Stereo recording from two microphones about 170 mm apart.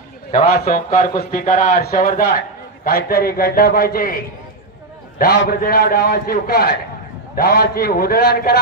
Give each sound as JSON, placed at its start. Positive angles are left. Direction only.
{"t": 0.5, "sound": "a man's voice", "side_deg": 55}
{"t": 5.2, "sound": "a man's voice", "side_deg": 60}